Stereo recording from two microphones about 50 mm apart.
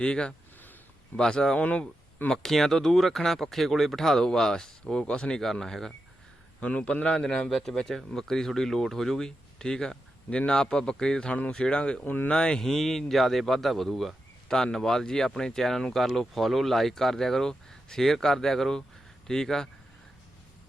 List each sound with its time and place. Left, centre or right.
0.0 s a man's voice: centre
1.5 s a man's voice: left
2.3 s speech: centre
5.4 s speech: centre
6.6 s a man's voice: left
7.5 s a man's voice: centre; by 11.9 s left
12.0 s speech: left
12.3 s speech: centre